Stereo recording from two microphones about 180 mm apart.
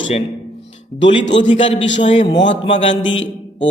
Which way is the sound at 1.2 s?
85° left.